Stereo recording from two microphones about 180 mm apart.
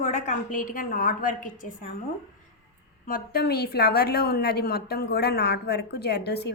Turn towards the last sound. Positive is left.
turn(degrees=65)  # may be behind; listen again after turning